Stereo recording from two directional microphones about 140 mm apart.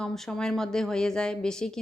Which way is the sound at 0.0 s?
5° left (ahead or behind).